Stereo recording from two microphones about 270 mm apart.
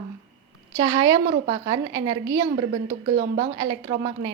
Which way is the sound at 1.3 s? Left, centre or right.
Centre.